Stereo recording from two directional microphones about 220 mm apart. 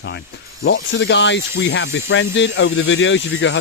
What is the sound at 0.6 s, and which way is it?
Speech, 55° left (ahead or behind).